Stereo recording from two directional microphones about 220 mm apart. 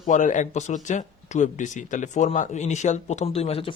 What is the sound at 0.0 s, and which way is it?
Speech, 35° left (ahead or behind).